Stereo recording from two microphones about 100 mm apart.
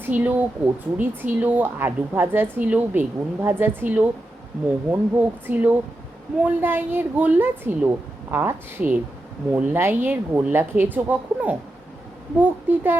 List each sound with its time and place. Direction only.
0.0 s a woman's voice: 20° right (ahead or behind)